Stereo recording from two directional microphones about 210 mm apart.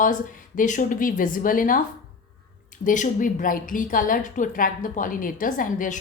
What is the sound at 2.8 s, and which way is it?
A woman's voice, 40° left (ahead or behind).